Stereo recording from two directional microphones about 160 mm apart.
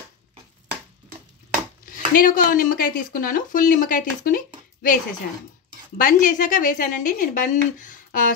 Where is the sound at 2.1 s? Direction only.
60° left (ahead or behind).